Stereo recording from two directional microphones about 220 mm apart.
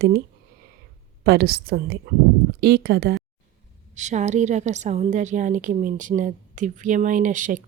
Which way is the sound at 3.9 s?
30° right (ahead or behind).